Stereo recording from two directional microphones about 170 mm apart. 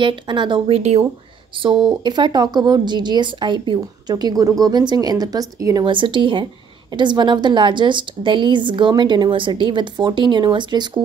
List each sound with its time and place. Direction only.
0.0 s speech: 30° right (ahead or behind)